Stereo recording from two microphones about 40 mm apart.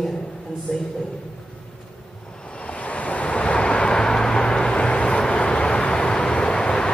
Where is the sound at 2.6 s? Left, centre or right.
Left.